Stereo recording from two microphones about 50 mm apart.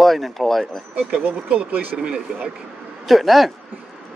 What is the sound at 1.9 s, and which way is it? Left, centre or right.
Speech, centre.